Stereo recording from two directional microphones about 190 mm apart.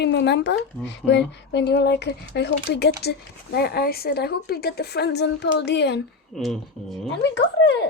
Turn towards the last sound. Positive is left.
turn(degrees=65)  # may be behind; listen again after turning